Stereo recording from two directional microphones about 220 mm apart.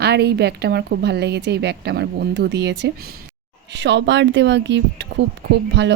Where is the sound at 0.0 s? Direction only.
50° right (ahead or behind).